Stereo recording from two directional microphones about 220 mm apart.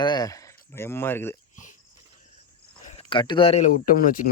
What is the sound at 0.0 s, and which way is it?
Speech, 20° left (ahead or behind).